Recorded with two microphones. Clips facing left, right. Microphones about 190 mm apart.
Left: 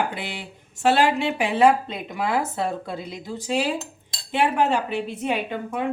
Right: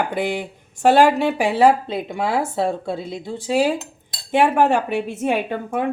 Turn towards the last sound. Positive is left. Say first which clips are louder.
# right 4 dB
turn(degrees=-50)  # may be behind; listen again after turning